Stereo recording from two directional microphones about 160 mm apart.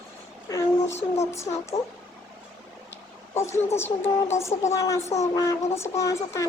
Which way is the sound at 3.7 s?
15° left (ahead or behind).